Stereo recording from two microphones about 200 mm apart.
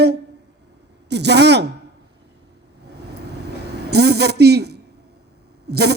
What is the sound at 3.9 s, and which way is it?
A man's voice, 55° right (ahead or behind).